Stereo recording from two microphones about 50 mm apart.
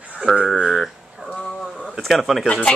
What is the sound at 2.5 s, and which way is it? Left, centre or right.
Speech, left.